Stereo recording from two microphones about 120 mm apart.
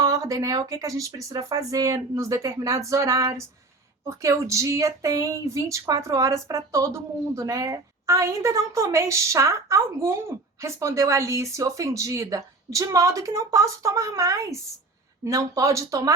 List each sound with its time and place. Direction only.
0.0 s speech: 30° right (ahead or behind)